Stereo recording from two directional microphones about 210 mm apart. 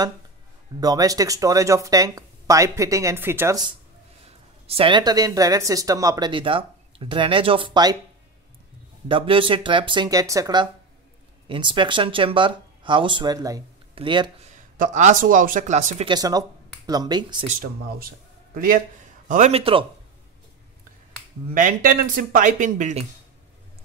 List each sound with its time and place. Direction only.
0.7 s speech: 20° right (ahead or behind)
4.6 s speech: 25° right (ahead or behind)
9.1 s speech: 25° right (ahead or behind)
14.5 s speech: 35° right (ahead or behind)
16.1 s speech: 15° right (ahead or behind)
17.5 s speech: 45° right (ahead or behind); by 19.9 s 25° right (ahead or behind)
21.5 s speech: 40° right (ahead or behind)